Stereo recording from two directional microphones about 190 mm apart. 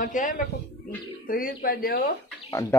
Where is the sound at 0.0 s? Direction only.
45° left (ahead or behind).